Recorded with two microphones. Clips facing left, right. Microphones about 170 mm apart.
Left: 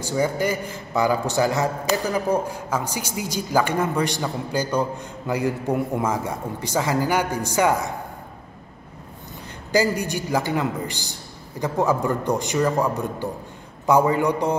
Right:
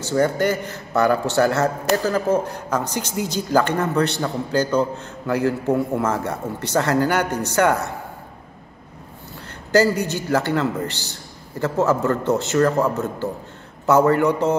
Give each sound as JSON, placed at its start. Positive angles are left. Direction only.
{"t": 0.0, "sound": "speech", "side_deg": 10}
{"t": 0.9, "sound": "a man's voice", "side_deg": -65}
{"t": 2.0, "sound": "speech", "side_deg": 15}
{"t": 9.7, "sound": "a man's voice", "side_deg": 15}